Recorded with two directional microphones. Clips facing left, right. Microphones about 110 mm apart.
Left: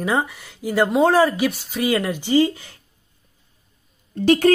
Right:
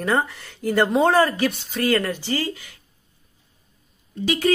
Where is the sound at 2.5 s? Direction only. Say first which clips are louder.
Right 1 dB; 30° left (ahead or behind).